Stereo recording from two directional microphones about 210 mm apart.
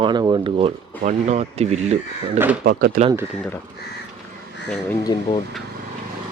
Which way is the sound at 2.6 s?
45° right (ahead or behind).